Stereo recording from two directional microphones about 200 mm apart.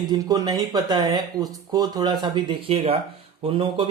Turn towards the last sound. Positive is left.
turn(degrees=-25)  # may be behind; listen again after turning